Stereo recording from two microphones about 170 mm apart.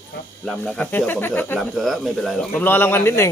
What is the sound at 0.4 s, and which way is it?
Speech, 5° left (ahead or behind).